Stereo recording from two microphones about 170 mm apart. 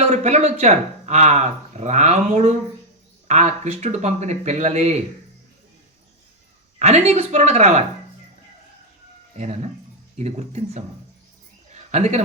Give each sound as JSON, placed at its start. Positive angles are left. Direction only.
{"t": 0.0, "sound": "speech", "side_deg": -40}
{"t": 6.7, "sound": "speech", "side_deg": -40}
{"t": 10.2, "sound": "speech", "side_deg": -40}
{"t": 11.7, "sound": "a sound", "side_deg": -40}